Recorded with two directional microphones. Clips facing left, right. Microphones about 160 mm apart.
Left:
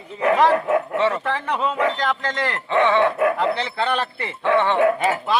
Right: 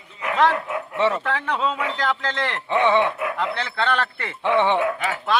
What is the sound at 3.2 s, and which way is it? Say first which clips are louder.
Speech: left 6 dB; 40° left (ahead or behind).